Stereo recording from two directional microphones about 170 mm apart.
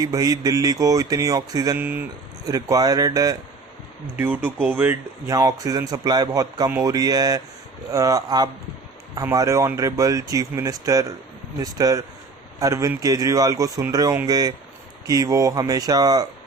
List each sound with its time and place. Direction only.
0.0 s speech: 20° right (ahead or behind)
4.2 s speech: 10° right (ahead or behind)